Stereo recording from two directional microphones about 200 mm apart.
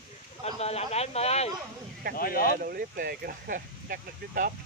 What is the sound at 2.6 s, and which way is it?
Speech, 45° right (ahead or behind).